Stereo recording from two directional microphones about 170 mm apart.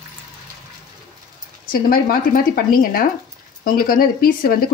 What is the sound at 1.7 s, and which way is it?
Speech, 55° left (ahead or behind).